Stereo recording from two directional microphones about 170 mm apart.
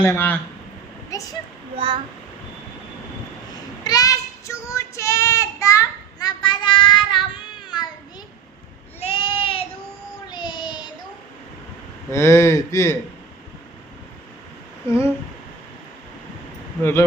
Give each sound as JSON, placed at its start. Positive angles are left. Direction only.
{"t": 0.0, "sound": "speech", "side_deg": 15}
{"t": 1.7, "sound": "a child's voice", "side_deg": -30}
{"t": 3.8, "sound": "child singing", "side_deg": 20}
{"t": 9.0, "sound": "a sound", "side_deg": 30}
{"t": 10.2, "sound": "child singing", "side_deg": 25}
{"t": 12.1, "sound": "speech", "side_deg": 15}
{"t": 14.8, "sound": "speech", "side_deg": 15}